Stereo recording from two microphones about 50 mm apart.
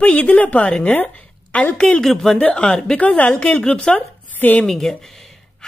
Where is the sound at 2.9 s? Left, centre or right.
Left.